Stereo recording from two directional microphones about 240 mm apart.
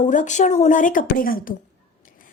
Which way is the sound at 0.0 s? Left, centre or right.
Left.